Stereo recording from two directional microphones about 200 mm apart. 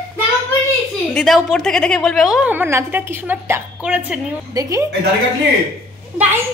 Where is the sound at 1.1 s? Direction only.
Centre (ahead or behind); by 4.9 s 15° right (ahead or behind).